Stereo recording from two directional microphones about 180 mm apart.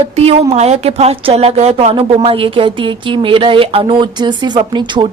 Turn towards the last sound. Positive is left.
turn(degrees=-25)  # may be behind; listen again after turning